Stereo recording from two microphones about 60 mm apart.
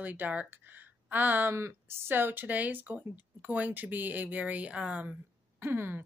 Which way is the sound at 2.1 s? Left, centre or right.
Right.